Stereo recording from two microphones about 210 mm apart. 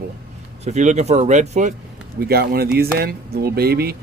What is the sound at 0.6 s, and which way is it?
Speech, 35° right (ahead or behind).